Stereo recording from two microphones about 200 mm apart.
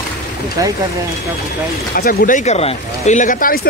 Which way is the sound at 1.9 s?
45° left (ahead or behind).